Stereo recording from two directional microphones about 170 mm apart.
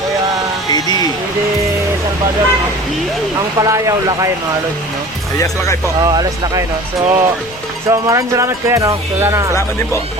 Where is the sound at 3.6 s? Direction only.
20° right (ahead or behind).